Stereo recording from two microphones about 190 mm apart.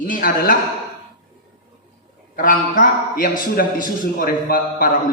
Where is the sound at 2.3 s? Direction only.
45° left (ahead or behind).